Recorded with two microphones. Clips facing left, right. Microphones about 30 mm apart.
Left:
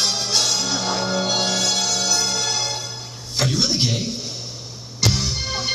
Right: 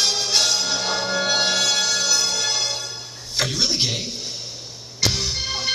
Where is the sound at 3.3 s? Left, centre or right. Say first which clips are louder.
Left 1 dB; centre.